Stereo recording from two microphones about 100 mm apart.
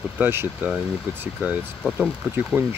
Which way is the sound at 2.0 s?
15° right (ahead or behind).